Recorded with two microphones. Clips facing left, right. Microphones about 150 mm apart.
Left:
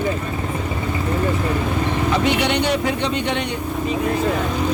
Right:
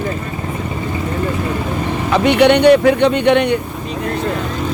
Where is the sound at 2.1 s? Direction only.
65° right (ahead or behind).